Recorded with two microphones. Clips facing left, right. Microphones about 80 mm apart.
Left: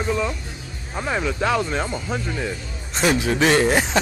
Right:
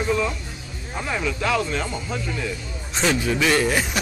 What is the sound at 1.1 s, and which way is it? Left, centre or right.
Speech, left.